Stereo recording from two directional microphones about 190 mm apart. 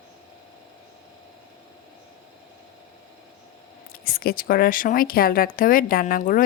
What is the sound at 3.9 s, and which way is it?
Speech, 50° left (ahead or behind).